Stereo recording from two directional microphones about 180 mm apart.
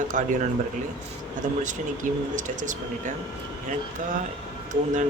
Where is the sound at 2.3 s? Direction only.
45° right (ahead or behind).